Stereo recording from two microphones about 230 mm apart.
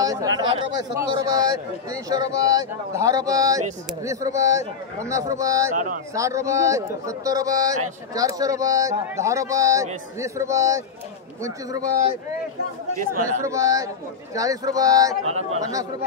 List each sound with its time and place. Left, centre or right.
0.0 s speech: centre
13.5 s speech: centre
15.2 s speech: right